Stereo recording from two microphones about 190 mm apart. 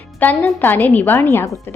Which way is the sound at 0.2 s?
10° left (ahead or behind).